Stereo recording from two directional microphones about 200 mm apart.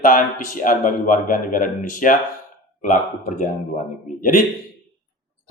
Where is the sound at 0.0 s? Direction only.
40° left (ahead or behind).